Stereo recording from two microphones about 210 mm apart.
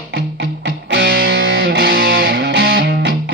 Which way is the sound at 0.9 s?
55° right (ahead or behind).